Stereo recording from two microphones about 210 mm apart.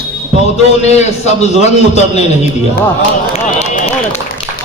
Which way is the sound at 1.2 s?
30° left (ahead or behind).